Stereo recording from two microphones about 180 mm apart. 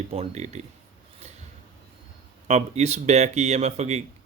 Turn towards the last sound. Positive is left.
turn(degrees=-40)  # may be behind; listen again after turning